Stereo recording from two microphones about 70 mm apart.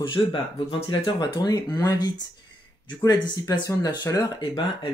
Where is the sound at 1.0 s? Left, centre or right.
Left.